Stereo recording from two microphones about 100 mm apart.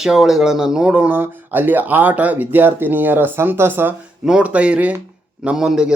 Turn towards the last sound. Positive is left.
turn(degrees=-5)  # may be behind; listen again after turning